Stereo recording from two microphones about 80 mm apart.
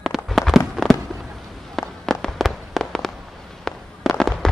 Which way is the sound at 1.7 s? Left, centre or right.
Centre.